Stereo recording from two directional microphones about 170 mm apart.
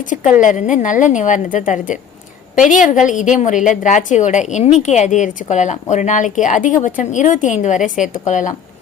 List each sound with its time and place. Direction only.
0.0 s a woman's voice: 50° left (ahead or behind)